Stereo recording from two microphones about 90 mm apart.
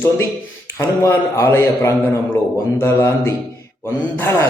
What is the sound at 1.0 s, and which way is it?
A man's voice, 30° left (ahead or behind).